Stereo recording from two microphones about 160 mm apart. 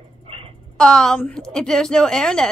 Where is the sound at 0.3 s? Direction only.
35° right (ahead or behind).